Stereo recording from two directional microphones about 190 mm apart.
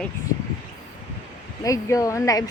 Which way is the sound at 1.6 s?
15° left (ahead or behind).